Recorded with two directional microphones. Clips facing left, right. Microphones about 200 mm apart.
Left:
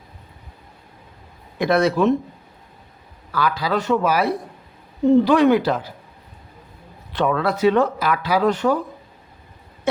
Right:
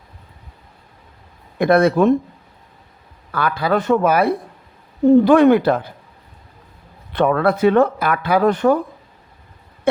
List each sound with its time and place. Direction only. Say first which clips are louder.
1.5 s speech: right 4 dB; 55° right (ahead or behind)
3.3 s speech: right 3 dB; 55° right (ahead or behind)
7.1 s speech: right 4 dB; 55° right (ahead or behind)